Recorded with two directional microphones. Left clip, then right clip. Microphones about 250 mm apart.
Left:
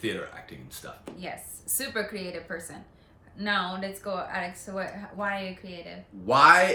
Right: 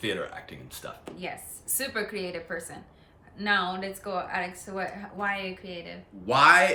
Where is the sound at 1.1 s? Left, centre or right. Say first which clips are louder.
Even; centre.